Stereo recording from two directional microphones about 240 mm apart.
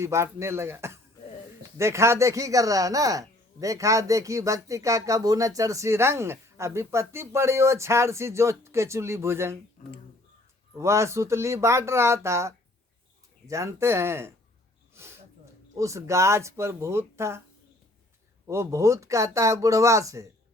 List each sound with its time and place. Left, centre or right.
0.0 s speech: centre
9.8 s speech: left
10.8 s speech: centre
14.9 s a sound: centre
15.8 s speech: centre
18.4 s speech: centre